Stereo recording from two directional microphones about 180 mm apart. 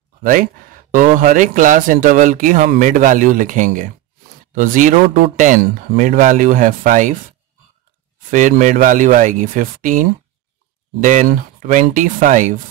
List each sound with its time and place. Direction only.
0.2 s speech: 50° right (ahead or behind)
8.3 s speech: 45° right (ahead or behind)